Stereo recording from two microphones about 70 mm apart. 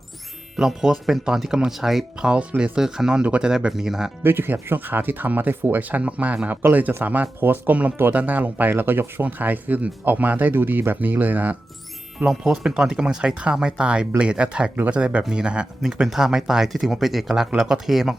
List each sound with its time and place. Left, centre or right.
0.5 s speech: centre
2.3 s speech: centre
2.7 s speech: centre
4.2 s speech: right
12.2 s speech: centre